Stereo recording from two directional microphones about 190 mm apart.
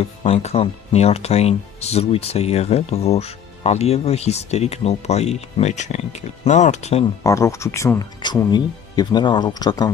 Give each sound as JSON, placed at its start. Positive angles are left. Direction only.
{"t": 0.0, "sound": "speech", "side_deg": 30}
{"t": 7.2, "sound": "speech", "side_deg": 15}